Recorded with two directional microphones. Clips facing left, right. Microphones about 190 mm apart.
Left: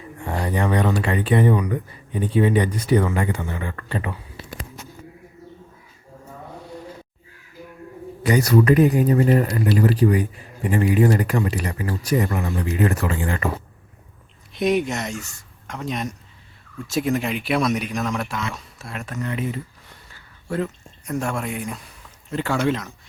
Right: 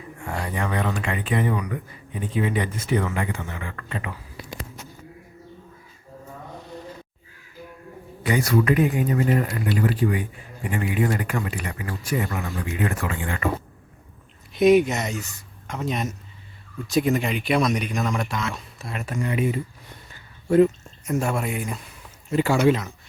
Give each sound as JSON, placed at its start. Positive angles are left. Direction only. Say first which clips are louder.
{"t": 0.2, "sound": "speech", "louder": "left 5 dB", "side_deg": 35}
{"t": 8.2, "sound": "speech", "louder": "left 4 dB", "side_deg": 40}
{"t": 14.5, "sound": "speech", "louder": "right 4 dB", "side_deg": 0}
{"t": 21.0, "sound": "speech", "louder": "right 1 dB", "side_deg": -5}